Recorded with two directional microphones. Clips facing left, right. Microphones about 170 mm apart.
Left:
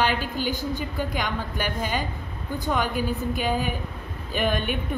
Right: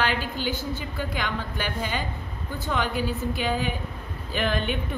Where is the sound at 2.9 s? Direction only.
45° left (ahead or behind).